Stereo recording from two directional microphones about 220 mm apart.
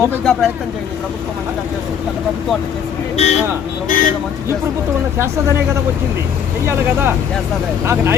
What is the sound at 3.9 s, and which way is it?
Speech, 35° left (ahead or behind).